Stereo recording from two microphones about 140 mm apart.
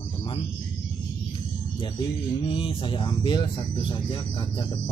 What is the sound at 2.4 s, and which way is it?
Speech, 35° left (ahead or behind).